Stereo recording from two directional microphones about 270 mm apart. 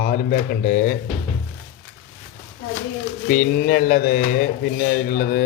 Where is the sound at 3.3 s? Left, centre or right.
Left.